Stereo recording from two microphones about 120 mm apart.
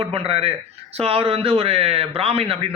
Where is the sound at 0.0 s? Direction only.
55° right (ahead or behind).